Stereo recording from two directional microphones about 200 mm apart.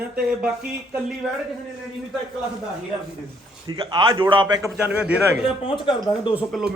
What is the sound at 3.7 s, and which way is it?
Speech, 25° right (ahead or behind).